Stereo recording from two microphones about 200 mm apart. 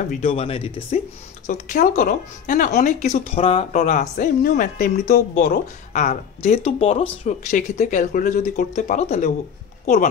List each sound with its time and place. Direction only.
0.1 s speech: 30° left (ahead or behind)
1.5 s speech: 45° left (ahead or behind)